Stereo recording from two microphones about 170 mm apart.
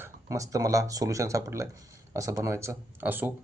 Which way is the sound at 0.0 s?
20° right (ahead or behind).